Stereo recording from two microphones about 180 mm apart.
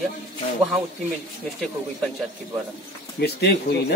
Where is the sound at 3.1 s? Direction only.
65° left (ahead or behind).